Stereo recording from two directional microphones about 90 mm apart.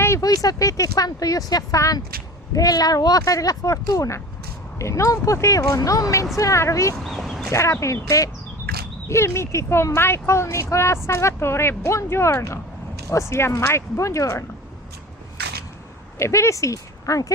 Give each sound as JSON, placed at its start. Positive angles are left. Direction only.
{"t": 0.2, "sound": "speech", "side_deg": 45}
{"t": 7.0, "sound": "a sound", "side_deg": 0}
{"t": 7.5, "sound": "speech", "side_deg": 35}
{"t": 9.0, "sound": "speech", "side_deg": 30}
{"t": 16.1, "sound": "speech", "side_deg": 30}